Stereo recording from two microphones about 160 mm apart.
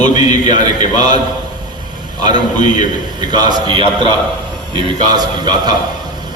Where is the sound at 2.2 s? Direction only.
25° right (ahead or behind).